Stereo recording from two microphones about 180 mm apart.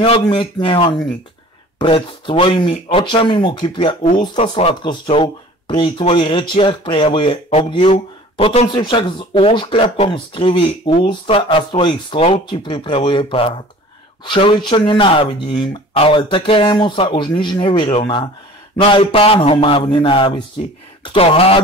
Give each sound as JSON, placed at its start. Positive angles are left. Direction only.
{"t": 0.0, "sound": "speech", "side_deg": 30}